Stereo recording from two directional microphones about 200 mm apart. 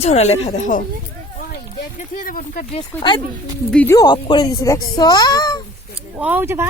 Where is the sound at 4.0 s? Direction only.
25° left (ahead or behind).